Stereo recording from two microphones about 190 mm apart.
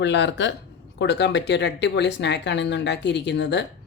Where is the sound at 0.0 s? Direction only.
70° left (ahead or behind).